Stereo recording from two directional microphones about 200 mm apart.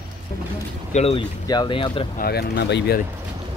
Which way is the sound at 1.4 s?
20° left (ahead or behind).